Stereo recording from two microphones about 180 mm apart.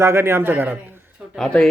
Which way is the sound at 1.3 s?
5° left (ahead or behind).